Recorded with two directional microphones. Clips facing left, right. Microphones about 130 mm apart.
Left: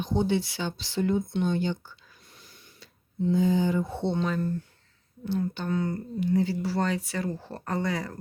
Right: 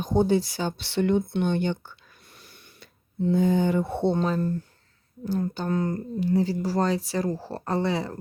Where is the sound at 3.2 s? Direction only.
55° right (ahead or behind); by 4.5 s 40° right (ahead or behind).